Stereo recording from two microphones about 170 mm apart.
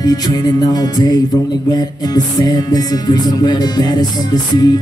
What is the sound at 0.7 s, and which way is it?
Music, 25° left (ahead or behind).